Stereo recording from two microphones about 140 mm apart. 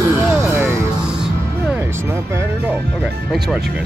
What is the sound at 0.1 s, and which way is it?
Music, 20° right (ahead or behind).